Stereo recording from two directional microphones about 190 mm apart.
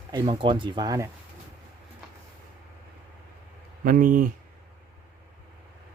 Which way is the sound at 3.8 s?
45° right (ahead or behind).